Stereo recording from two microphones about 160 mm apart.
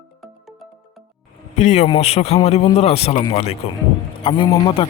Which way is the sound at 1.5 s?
45° left (ahead or behind).